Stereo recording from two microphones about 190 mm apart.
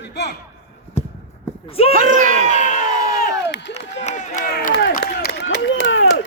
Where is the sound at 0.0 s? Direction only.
65° left (ahead or behind).